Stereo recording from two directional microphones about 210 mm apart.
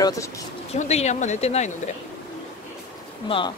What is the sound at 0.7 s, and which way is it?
Speech, 30° left (ahead or behind).